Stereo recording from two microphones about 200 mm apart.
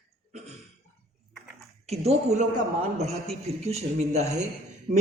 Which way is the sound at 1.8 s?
30° right (ahead or behind).